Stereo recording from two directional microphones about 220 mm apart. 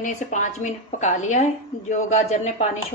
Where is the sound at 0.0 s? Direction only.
35° left (ahead or behind).